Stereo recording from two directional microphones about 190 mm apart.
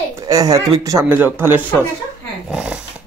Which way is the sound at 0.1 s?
20° right (ahead or behind).